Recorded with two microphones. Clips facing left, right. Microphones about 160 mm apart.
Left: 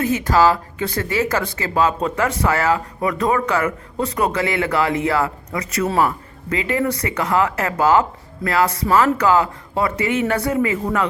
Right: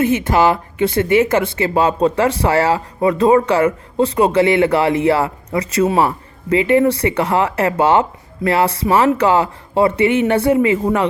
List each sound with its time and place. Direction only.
0.0 s speech: 25° right (ahead or behind)